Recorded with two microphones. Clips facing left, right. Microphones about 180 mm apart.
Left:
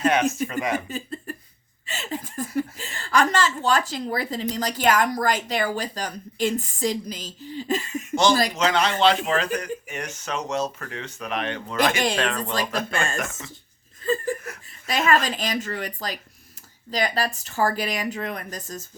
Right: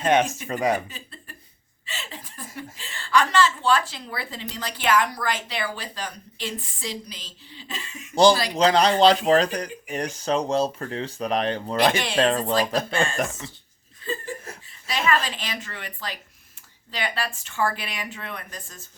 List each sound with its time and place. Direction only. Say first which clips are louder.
0.0 s speech: even; 30° right (ahead or behind)
0.9 s a sound: left 11 dB; 45° left (ahead or behind)
1.9 s speech: left 7 dB; 45° left (ahead or behind)
8.1 s speech: right 3 dB; 35° right (ahead or behind)
14.0 s chuckle: left 7 dB; 45° left (ahead or behind)
14.8 s speech: left 3 dB; 45° left (ahead or behind)